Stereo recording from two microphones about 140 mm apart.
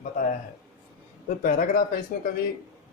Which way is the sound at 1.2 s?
75° left (ahead or behind).